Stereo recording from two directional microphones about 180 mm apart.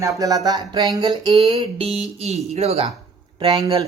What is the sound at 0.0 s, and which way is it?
Speech, 20° right (ahead or behind).